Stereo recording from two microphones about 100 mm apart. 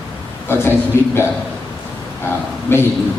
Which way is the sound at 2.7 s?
20° left (ahead or behind).